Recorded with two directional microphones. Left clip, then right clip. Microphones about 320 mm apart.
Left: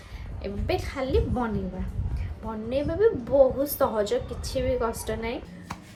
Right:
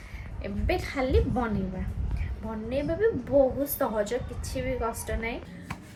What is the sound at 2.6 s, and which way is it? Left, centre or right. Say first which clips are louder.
A woman's voice: left 3 dB; centre.